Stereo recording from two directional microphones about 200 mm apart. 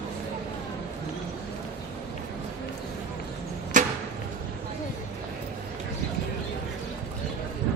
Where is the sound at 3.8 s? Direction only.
40° right (ahead or behind).